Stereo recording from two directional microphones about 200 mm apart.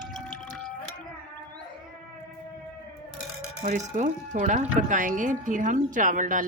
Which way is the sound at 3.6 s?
40° right (ahead or behind).